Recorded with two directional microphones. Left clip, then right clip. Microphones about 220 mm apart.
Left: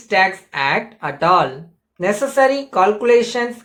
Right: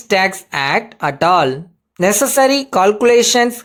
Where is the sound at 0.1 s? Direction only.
50° right (ahead or behind).